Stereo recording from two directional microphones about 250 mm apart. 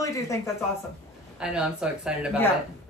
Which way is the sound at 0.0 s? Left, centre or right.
Centre.